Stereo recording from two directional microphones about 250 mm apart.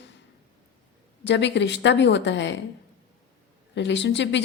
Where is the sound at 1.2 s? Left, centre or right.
Left.